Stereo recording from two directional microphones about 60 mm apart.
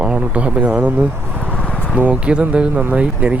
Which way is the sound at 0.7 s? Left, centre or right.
Right.